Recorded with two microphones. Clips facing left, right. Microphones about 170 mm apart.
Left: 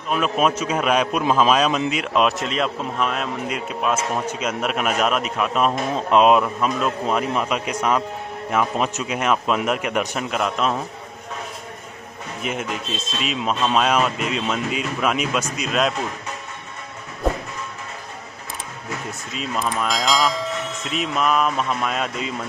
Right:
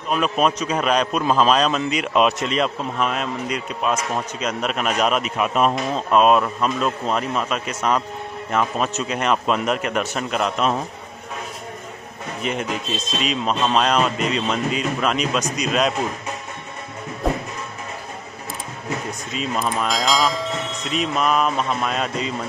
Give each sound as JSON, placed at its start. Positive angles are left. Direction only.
{"t": 0.1, "sound": "a man's voice", "side_deg": 5}
{"t": 5.9, "sound": "a man's voice", "side_deg": 20}
{"t": 6.4, "sound": "a man's voice", "side_deg": 5}
{"t": 12.4, "sound": "a man's voice", "side_deg": 5}
{"t": 19.3, "sound": "a man's voice", "side_deg": 0}